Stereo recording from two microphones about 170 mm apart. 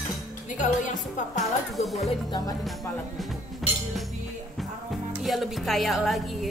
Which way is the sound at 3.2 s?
Centre (ahead or behind).